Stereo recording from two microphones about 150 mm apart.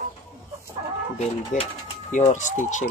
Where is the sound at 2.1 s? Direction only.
55° left (ahead or behind).